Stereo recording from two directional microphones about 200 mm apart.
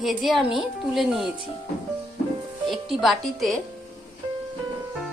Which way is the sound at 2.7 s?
Centre (ahead or behind).